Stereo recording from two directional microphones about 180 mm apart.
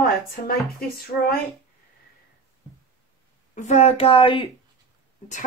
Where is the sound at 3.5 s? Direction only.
40° left (ahead or behind).